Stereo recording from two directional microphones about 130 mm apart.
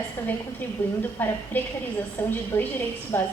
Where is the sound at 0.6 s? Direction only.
10° left (ahead or behind).